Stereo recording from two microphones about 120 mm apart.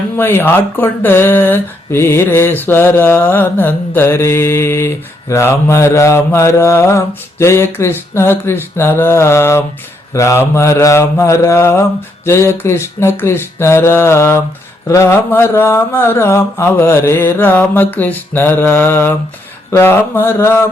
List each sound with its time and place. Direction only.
0.2 s speech: 20° left (ahead or behind)